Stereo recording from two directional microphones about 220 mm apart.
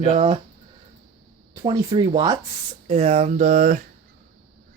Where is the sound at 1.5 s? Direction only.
15° right (ahead or behind).